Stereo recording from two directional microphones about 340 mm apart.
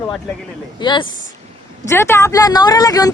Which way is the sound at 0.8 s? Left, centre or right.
Centre.